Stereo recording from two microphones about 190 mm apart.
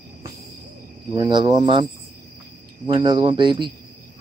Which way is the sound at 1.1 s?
25° right (ahead or behind).